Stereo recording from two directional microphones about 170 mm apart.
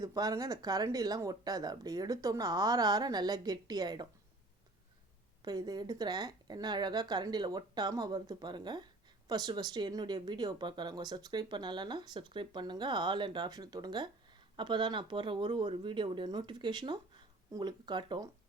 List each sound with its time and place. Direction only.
0.0 s speech: 20° right (ahead or behind)
5.5 s speech: 25° right (ahead or behind)